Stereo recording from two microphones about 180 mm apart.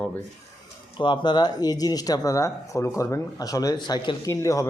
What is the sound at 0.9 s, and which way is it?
Speech, 25° left (ahead or behind).